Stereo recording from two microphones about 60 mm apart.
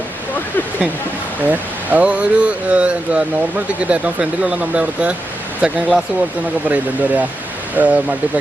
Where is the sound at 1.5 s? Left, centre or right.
Right.